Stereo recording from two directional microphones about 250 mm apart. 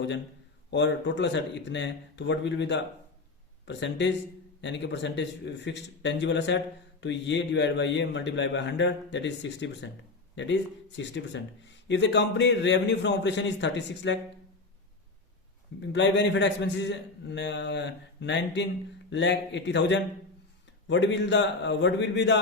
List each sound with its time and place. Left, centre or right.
0.7 s speech: left
15.9 s speech: left